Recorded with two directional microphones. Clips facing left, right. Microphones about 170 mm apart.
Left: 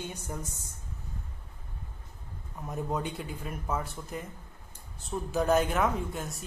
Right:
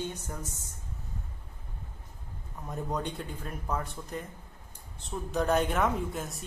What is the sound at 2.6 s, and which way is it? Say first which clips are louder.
Speech: left 1 dB; 5° left (ahead or behind).